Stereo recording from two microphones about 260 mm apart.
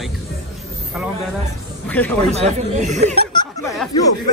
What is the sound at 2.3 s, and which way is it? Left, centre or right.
Speech, right.